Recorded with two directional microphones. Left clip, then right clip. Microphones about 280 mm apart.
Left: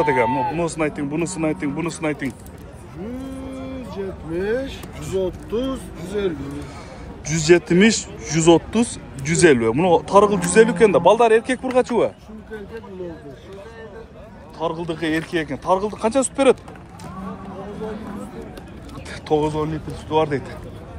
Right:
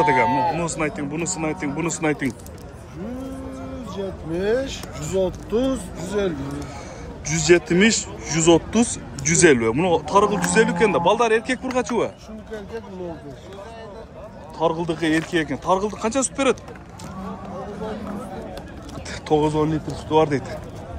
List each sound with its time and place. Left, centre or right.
0.0 s a man's voice: centre
0.3 s speech: right
0.6 s speech: centre
1.9 s a man's voice: centre
5.2 s speech: right
7.2 s a man's voice: centre
14.6 s a man's voice: centre
19.2 s a man's voice: centre